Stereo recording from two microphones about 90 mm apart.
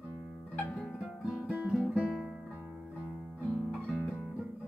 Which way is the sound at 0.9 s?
Centre (ahead or behind).